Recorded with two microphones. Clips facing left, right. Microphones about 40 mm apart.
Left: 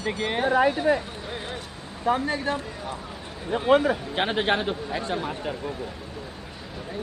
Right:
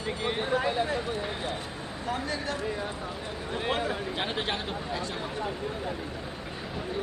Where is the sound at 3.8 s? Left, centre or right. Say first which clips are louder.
Left 6 dB; left.